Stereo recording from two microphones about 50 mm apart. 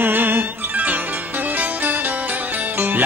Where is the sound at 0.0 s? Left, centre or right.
Right.